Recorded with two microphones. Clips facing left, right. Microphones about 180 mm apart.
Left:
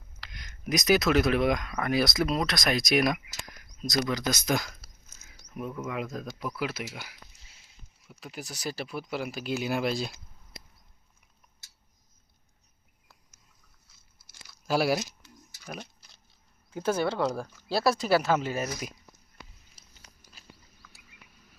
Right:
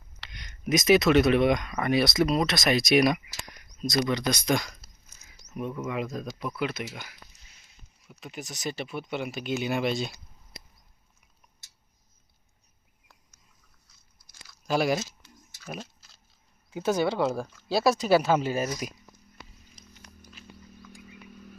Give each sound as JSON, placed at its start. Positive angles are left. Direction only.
{"t": 0.2, "sound": "speech", "side_deg": 0}
{"t": 13.8, "sound": "biting", "side_deg": 5}
{"t": 14.7, "sound": "speech", "side_deg": 5}
{"t": 15.8, "sound": "a sound", "side_deg": 15}
{"t": 16.7, "sound": "speech", "side_deg": -5}
{"t": 18.4, "sound": "speech", "side_deg": -30}
{"t": 19.8, "sound": "a sound", "side_deg": 5}